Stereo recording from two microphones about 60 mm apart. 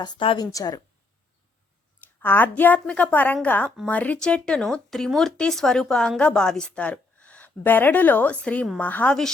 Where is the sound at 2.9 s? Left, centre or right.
Centre.